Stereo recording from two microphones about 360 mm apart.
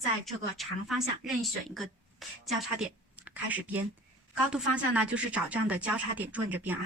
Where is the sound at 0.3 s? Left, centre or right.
Centre.